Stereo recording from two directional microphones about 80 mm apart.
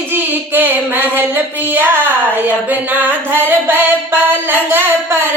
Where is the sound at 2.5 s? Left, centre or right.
Right.